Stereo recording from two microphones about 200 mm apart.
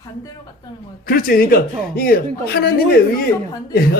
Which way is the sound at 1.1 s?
45° left (ahead or behind).